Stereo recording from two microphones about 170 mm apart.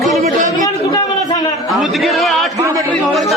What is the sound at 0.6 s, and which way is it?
Speech, 20° left (ahead or behind).